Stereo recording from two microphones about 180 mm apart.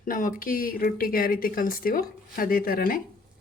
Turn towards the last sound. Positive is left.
turn(degrees=55)  # may be behind; listen again after turning